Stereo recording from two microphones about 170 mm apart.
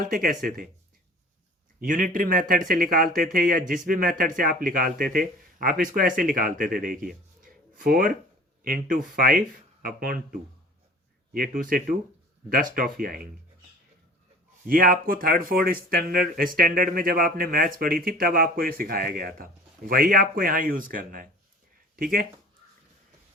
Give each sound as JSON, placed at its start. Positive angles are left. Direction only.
{"t": 0.0, "sound": "speech", "side_deg": -55}
{"t": 1.9, "sound": "speech", "side_deg": -50}
{"t": 14.7, "sound": "speech", "side_deg": -55}